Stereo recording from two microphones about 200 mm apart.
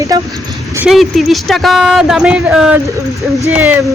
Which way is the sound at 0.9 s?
Centre (ahead or behind).